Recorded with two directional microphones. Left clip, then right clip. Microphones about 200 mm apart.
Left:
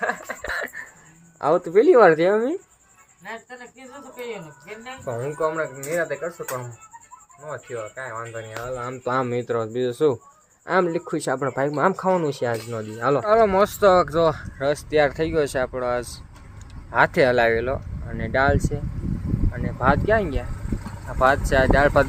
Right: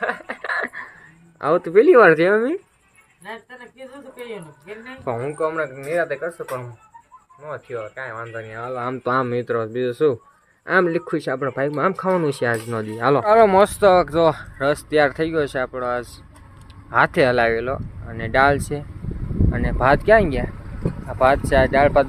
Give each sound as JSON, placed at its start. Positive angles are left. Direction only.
{"t": 0.3, "sound": "a sound", "side_deg": -35}
{"t": 1.4, "sound": "speech", "side_deg": -5}
{"t": 5.1, "sound": "speech", "side_deg": -45}
{"t": 5.4, "sound": "speech", "side_deg": -5}
{"t": 8.6, "sound": "speech", "side_deg": -40}
{"t": 9.0, "sound": "speech", "side_deg": -10}
{"t": 21.2, "sound": "speech", "side_deg": -5}